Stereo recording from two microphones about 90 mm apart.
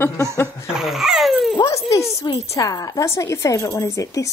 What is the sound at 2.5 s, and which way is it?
Speech, 40° left (ahead or behind).